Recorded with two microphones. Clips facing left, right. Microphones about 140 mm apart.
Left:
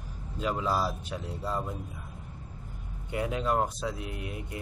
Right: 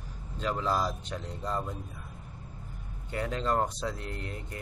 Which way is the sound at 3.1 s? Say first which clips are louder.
Left 1 dB; 10° left (ahead or behind).